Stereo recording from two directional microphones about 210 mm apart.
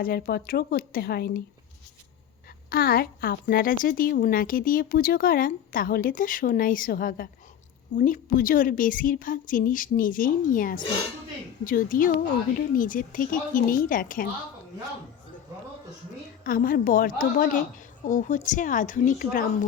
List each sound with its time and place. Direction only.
0.0 s a woman's voice: 45° left (ahead or behind)
2.6 s a woman's voice: 45° left (ahead or behind)
16.4 s a woman's voice: 40° left (ahead or behind)